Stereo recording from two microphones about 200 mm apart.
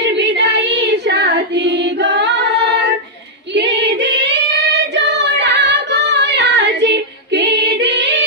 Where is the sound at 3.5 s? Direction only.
60° right (ahead or behind).